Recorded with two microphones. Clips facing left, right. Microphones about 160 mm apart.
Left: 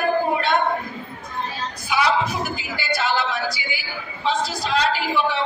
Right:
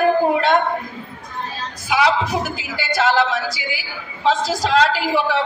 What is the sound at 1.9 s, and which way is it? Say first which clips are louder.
A woman's voice: right 3 dB; 90° right.